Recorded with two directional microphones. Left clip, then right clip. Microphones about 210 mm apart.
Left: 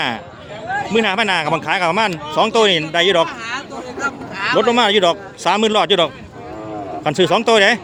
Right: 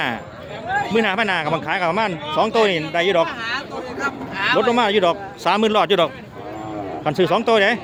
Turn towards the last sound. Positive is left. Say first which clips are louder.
# left 4 dB
turn(degrees=15)  # may be behind; listen again after turning